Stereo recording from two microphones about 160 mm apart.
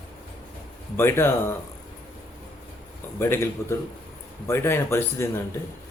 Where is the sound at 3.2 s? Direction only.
15° left (ahead or behind).